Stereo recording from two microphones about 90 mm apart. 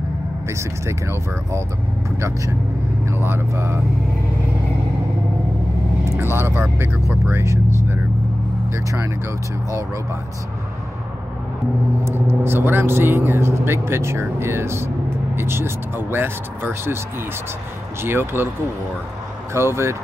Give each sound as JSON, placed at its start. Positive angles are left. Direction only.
{"t": 0.5, "sound": "speech", "side_deg": -30}
{"t": 6.1, "sound": "speech", "side_deg": -25}
{"t": 8.7, "sound": "speech", "side_deg": -30}
{"t": 12.0, "sound": "speech", "side_deg": -25}
{"t": 18.0, "sound": "speech", "side_deg": -25}
{"t": 19.5, "sound": "speech", "side_deg": -30}